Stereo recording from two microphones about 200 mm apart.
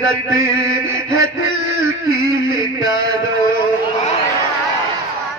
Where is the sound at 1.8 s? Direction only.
85° left.